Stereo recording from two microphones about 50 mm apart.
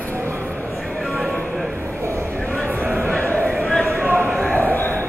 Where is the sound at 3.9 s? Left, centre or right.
Right.